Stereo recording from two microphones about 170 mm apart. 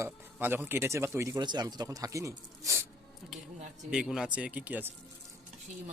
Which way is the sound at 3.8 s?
5° right (ahead or behind).